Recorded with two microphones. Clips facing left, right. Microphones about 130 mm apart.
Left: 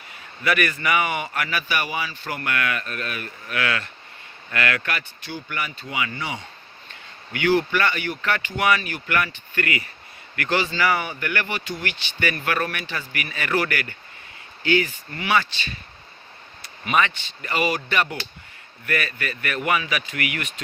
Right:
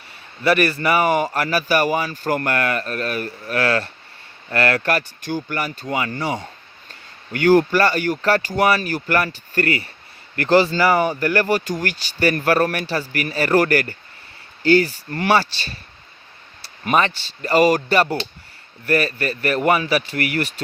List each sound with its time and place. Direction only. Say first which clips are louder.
0.4 s speech: right 5 dB; 35° right (ahead or behind)
16.8 s speech: right 3 dB; 35° right (ahead or behind)